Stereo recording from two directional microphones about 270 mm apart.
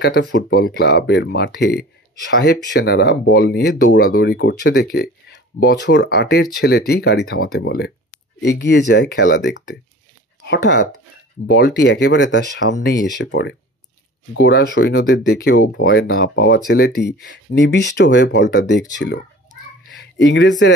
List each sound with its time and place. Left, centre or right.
0.0 s speech: left